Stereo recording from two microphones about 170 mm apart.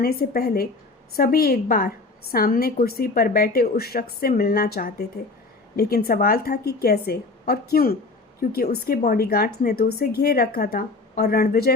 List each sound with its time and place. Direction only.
0.0 s a woman's voice: 65° left (ahead or behind)